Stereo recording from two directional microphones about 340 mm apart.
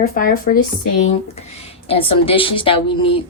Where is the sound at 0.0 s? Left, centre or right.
Left.